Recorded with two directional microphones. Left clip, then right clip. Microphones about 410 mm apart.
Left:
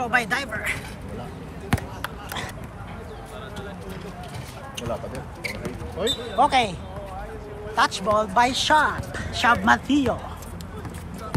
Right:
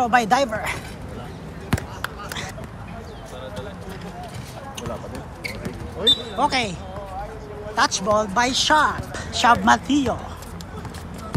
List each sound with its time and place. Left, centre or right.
0.0 s speech: centre
1.7 s basketball bounce: centre
6.0 s speech: centre
6.3 s speech: centre
7.7 s speech: centre